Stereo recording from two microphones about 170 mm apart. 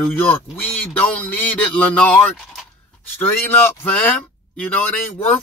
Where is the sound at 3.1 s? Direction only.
10° left (ahead or behind).